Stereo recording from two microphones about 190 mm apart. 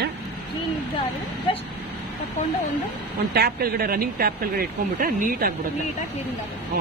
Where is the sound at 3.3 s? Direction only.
55° right (ahead or behind).